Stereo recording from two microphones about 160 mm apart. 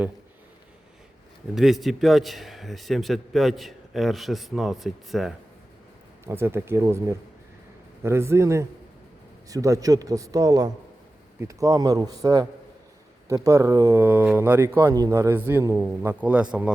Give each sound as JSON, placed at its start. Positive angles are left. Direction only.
{"t": 1.5, "sound": "a man's voice", "side_deg": 0}
{"t": 6.2, "sound": "a man's voice", "side_deg": -15}